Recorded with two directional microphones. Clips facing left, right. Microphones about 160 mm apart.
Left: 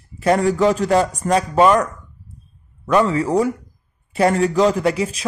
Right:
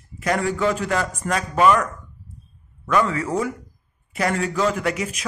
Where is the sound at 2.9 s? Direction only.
30° left (ahead or behind).